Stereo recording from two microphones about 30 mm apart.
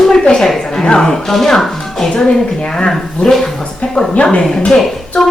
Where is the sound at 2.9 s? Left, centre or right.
Centre.